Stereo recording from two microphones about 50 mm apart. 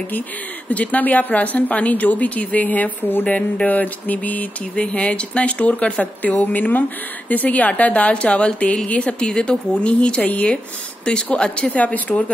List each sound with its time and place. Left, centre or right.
0.7 s a woman's voice: left